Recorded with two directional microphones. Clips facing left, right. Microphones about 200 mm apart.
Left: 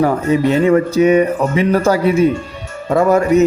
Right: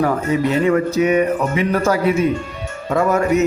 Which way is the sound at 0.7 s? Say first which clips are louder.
Left 6 dB; 30° left (ahead or behind).